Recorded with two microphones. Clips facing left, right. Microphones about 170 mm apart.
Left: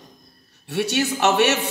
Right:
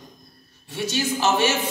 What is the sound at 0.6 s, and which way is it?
Speech, 70° left (ahead or behind).